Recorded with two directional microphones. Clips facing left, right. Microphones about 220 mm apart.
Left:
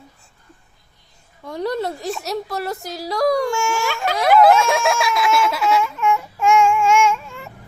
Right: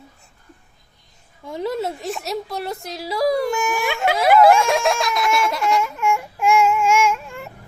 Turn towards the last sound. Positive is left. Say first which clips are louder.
# left 1 dB
turn(degrees=-5)  # may be behind; listen again after turning